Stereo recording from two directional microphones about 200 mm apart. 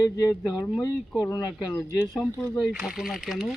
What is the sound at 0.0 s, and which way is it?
Speech, 15° left (ahead or behind).